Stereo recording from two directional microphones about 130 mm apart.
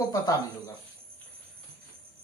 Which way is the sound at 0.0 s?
30° left (ahead or behind).